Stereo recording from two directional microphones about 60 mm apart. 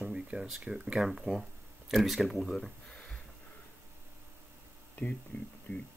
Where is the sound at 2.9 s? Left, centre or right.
Centre.